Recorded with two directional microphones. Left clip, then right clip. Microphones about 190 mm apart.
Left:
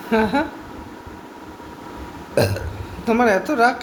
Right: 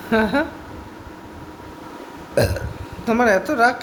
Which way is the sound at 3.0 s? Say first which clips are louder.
Even; 15° right (ahead or behind).